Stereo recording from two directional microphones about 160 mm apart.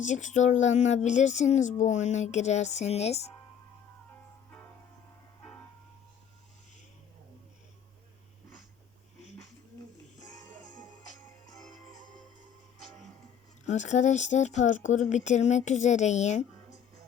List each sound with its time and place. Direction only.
0.0 s speech: 50° left (ahead or behind)
13.7 s speech: 45° left (ahead or behind)